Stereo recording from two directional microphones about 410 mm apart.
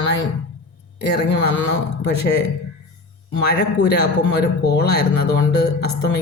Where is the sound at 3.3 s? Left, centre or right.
Left.